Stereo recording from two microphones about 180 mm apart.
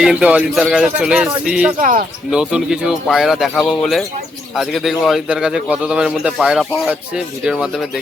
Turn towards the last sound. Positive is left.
turn(degrees=0)  # may be behind; listen again after turning